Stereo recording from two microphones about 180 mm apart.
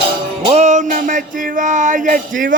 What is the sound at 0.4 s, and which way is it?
Music, 40° right (ahead or behind).